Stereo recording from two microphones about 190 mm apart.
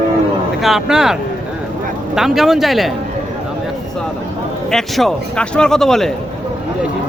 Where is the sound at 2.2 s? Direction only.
Centre (ahead or behind).